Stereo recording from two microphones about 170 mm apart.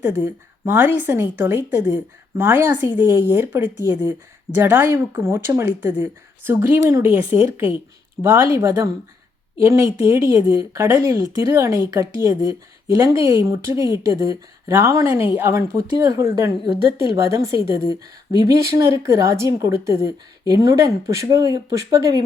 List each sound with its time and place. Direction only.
0.0 s speech: 10° right (ahead or behind)